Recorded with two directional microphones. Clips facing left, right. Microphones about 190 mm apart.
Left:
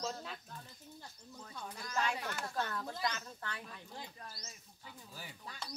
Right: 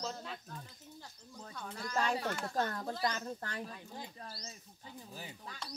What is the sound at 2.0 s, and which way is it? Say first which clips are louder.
Speech: right 3 dB; 35° right (ahead or behind).